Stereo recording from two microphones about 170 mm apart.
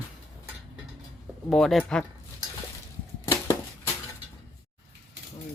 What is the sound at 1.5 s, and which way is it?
Speech, centre (ahead or behind).